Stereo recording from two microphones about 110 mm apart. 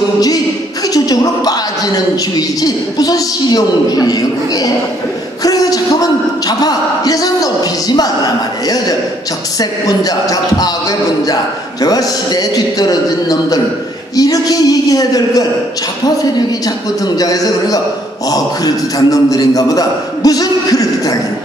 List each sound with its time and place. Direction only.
0.8 s a man's voice: 35° left (ahead or behind)
5.4 s a sound: 35° left (ahead or behind)
9.6 s a man's voice: 35° left (ahead or behind)
17.2 s a man's voice: 35° left (ahead or behind)